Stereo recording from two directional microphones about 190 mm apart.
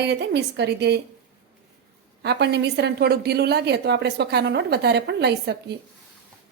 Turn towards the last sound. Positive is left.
turn(degrees=-60)  # may be behind; listen again after turning